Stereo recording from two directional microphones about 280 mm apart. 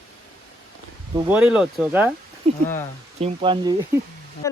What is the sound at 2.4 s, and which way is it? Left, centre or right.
Speech, right.